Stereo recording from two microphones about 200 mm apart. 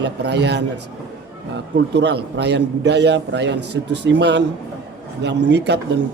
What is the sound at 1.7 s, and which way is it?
A man's voice, 60° right (ahead or behind).